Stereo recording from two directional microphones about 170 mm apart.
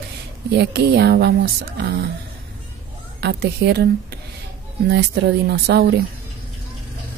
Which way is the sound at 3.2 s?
80° right.